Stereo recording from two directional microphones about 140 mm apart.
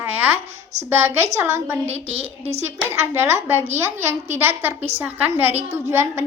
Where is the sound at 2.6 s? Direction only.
20° right (ahead or behind).